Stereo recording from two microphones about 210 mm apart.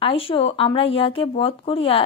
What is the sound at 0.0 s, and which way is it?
Speech, 25° left (ahead or behind).